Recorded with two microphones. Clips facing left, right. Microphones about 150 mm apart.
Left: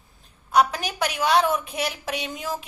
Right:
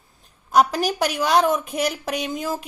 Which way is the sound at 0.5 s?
45° right (ahead or behind).